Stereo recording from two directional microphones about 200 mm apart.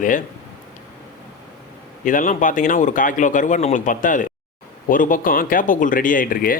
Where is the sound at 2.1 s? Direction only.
40° left (ahead or behind).